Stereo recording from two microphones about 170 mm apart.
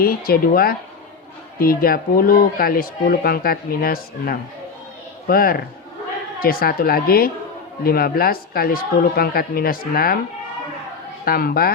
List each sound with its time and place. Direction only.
0.0 s speech: 60° left (ahead or behind)
11.3 s speech: 60° left (ahead or behind)